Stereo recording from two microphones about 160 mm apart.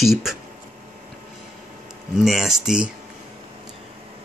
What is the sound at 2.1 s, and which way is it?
Speech, centre (ahead or behind).